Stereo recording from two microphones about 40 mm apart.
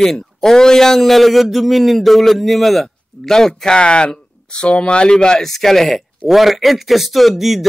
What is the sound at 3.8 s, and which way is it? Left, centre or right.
A man's voice, left.